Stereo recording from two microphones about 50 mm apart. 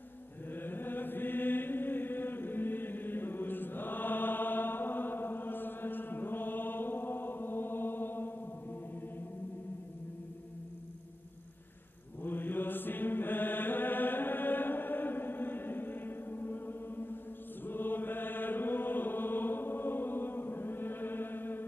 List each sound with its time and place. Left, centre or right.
0.5 s chant: left
12.2 s mantra: left